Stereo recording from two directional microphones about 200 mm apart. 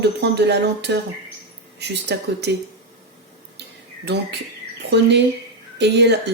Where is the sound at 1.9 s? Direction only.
55° right (ahead or behind).